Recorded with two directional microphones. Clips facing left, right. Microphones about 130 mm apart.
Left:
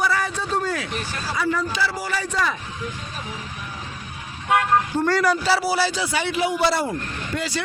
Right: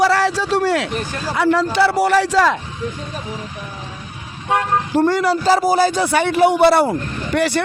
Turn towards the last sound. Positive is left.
turn(degrees=-70)  # may be behind; listen again after turning